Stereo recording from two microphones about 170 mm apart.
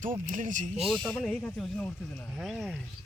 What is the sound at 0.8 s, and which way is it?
Speech, 5° left (ahead or behind).